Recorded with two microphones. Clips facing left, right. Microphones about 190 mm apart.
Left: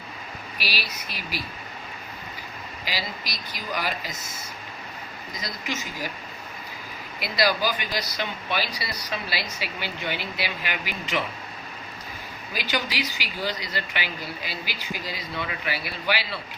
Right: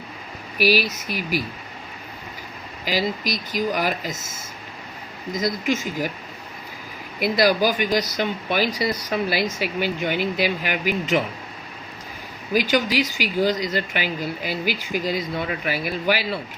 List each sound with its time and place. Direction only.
0.6 s speech: 45° right (ahead or behind)
2.8 s speech: 50° right (ahead or behind)
5.4 s speech: 50° right (ahead or behind)
7.2 s speech: 50° right (ahead or behind)
12.5 s speech: 45° right (ahead or behind)